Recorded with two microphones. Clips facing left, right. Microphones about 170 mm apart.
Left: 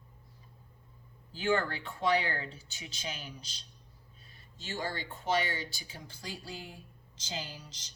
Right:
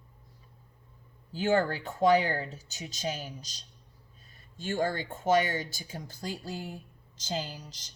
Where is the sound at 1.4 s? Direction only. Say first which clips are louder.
Right 4 dB; 45° right (ahead or behind).